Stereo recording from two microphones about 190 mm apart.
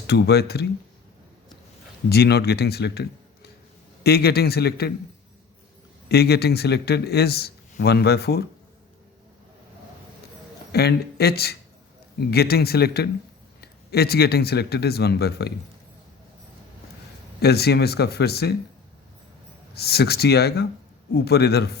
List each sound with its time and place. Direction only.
0.1 s speech: 60° left (ahead or behind)
2.0 s speech: 60° left (ahead or behind)
6.1 s speech: 55° left (ahead or behind)
10.7 s speech: 55° left (ahead or behind)
17.4 s speech: 55° left (ahead or behind)
19.7 s speech: 55° left (ahead or behind)